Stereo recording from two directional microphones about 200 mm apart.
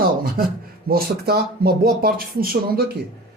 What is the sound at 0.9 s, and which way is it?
A man's voice, 50° right (ahead or behind).